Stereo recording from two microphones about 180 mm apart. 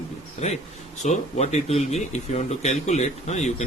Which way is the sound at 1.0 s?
40° left (ahead or behind).